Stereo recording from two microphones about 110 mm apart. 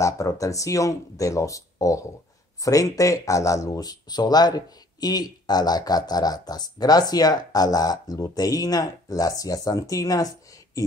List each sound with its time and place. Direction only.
0.0 s speech: 30° left (ahead or behind)